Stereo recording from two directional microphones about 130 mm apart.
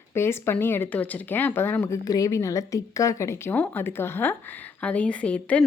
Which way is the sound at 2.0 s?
25° left (ahead or behind).